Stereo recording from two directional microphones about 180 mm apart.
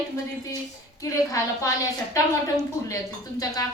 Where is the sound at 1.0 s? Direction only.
20° left (ahead or behind).